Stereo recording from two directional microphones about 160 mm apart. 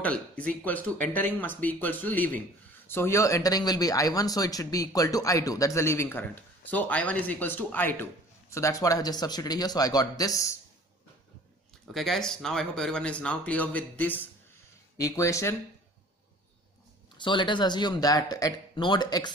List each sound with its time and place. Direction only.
0.0 s speech: 10° left (ahead or behind)
11.9 s speech: centre (ahead or behind); by 15.5 s 20° left (ahead or behind)
17.2 s speech: 30° left (ahead or behind)